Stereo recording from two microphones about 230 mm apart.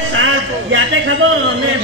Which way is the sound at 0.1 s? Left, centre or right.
Right.